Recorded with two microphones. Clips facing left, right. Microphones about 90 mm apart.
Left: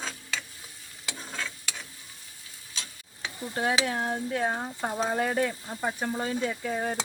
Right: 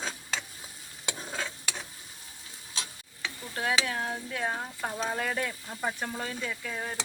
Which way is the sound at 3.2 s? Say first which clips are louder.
Left 4 dB; 30° left (ahead or behind).